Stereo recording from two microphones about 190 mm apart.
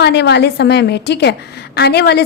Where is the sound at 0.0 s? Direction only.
60° left (ahead or behind).